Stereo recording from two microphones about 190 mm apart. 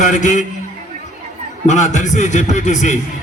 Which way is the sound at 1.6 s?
40° left (ahead or behind).